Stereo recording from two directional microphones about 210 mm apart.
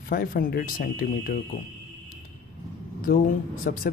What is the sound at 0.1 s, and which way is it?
Speech, 45° left (ahead or behind).